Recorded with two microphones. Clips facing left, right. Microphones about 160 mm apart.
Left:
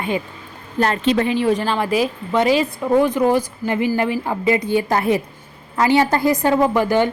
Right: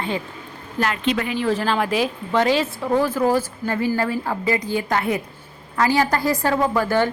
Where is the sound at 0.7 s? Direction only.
35° left (ahead or behind).